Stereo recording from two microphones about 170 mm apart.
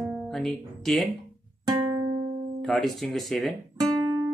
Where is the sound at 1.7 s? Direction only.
20° right (ahead or behind).